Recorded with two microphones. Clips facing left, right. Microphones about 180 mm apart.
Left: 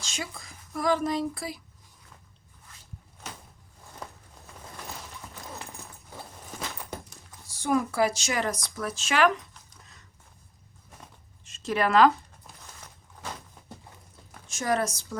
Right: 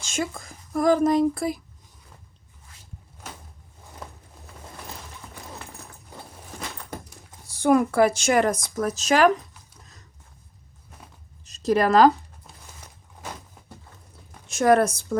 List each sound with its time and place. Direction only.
0.1 s speech: 50° right (ahead or behind)
4.0 s a sound: centre (ahead or behind)
7.5 s speech: 60° right (ahead or behind); by 9.3 s 40° right (ahead or behind)
11.4 s a woman's voice: 40° right (ahead or behind)
14.4 s speech: 65° right (ahead or behind)